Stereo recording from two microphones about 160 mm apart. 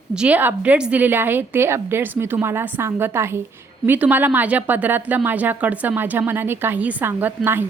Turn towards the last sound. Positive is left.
turn(degrees=-15)  # may be behind; listen again after turning